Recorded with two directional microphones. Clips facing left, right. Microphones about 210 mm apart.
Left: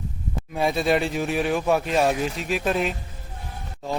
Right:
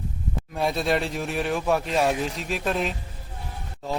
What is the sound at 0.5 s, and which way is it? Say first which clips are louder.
Speech: left 3 dB; centre (ahead or behind).